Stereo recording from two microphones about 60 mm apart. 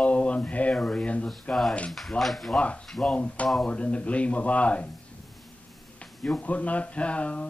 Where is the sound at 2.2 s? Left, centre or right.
Centre.